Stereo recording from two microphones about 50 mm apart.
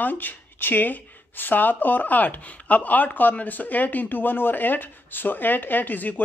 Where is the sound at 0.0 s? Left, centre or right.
Left.